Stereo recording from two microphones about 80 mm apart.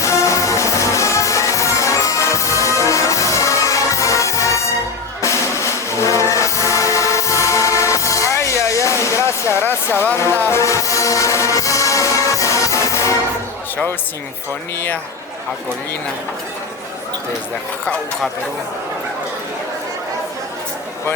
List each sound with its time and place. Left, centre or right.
0.0 s music: left
10.6 s music: left